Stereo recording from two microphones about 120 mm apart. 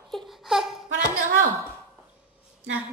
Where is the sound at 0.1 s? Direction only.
Centre (ahead or behind).